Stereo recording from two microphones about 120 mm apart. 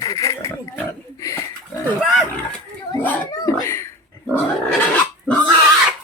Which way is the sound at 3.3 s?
25° left (ahead or behind).